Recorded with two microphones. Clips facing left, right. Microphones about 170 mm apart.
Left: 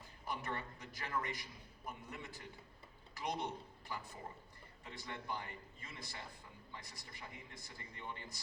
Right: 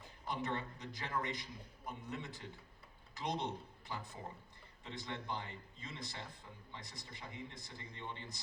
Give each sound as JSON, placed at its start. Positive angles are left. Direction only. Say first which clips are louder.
{"t": 0.3, "sound": "speech", "louder": "right 3 dB", "side_deg": -20}